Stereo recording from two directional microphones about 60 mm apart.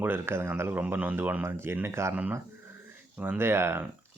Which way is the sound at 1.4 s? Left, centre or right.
Right.